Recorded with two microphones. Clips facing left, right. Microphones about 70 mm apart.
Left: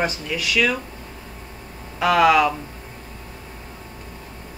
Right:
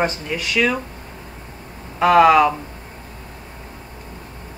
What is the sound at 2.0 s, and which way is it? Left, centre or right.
Speech, right.